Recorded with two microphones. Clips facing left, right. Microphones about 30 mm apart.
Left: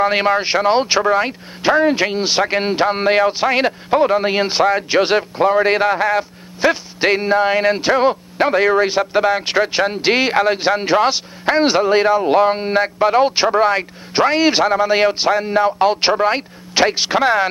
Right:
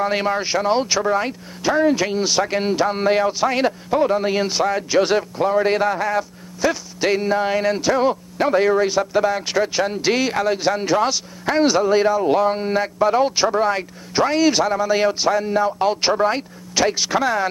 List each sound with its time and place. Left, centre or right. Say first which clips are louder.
0.0 s speech: left 5 dB; left